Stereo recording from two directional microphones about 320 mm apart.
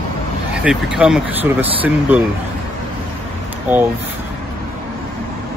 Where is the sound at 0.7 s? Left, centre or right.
Centre.